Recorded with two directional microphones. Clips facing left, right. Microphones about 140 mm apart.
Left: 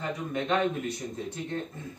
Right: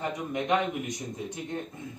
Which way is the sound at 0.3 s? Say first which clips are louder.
Even; 15° right (ahead or behind).